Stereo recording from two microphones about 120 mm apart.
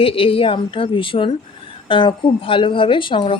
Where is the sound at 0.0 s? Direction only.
50° left (ahead or behind).